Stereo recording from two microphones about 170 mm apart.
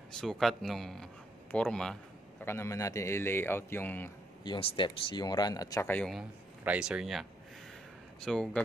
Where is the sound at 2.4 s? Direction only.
15° left (ahead or behind).